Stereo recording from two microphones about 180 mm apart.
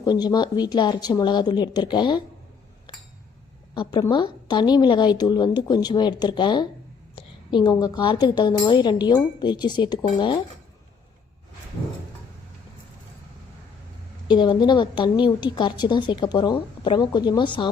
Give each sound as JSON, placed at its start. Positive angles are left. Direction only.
{"t": 0.0, "sound": "a woman's voice", "side_deg": 20}
{"t": 4.1, "sound": "a woman's voice", "side_deg": 25}
{"t": 14.3, "sound": "a woman's voice", "side_deg": 25}